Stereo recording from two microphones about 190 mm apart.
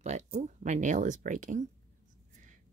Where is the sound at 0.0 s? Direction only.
35° right (ahead or behind).